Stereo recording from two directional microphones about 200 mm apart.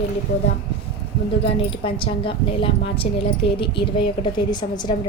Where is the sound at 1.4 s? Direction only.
25° left (ahead or behind).